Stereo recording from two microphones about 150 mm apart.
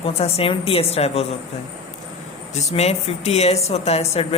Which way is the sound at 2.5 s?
45° left (ahead or behind).